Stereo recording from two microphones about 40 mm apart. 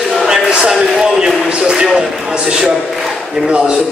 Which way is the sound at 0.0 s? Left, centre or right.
Centre.